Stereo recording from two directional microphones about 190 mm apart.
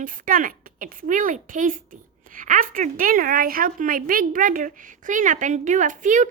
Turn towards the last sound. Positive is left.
turn(degrees=-40)  # may be behind; listen again after turning